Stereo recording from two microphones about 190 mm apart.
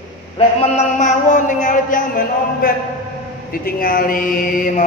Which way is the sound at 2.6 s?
50° left (ahead or behind).